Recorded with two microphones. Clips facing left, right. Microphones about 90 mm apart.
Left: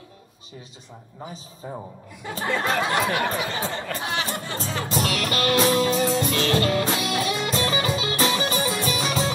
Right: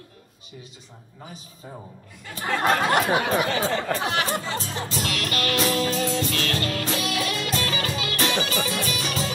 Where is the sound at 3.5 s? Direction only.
90° right.